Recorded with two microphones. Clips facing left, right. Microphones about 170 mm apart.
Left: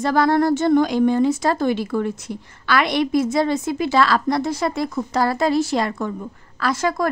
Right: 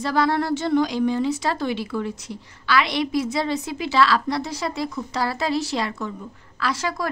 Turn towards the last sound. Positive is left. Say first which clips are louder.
# left 5 dB
turn(degrees=50)  # may be behind; listen again after turning